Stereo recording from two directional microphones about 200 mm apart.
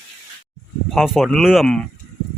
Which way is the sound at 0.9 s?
Centre (ahead or behind).